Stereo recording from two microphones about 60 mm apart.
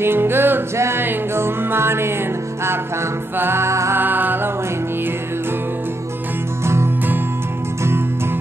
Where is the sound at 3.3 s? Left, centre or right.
Right.